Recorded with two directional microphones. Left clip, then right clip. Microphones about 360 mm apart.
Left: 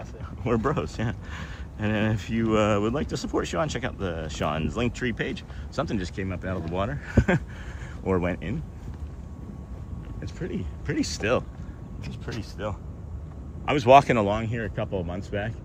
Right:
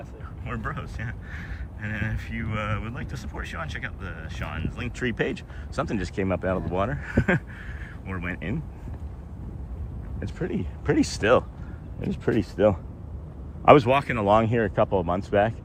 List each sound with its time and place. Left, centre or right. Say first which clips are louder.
0.4 s speech: left 8 dB; centre
10.2 s speech: right 4 dB; centre
12.1 s speech: right 12 dB; centre
13.8 s speech: left 7 dB; centre
14.3 s speech: right 8 dB; centre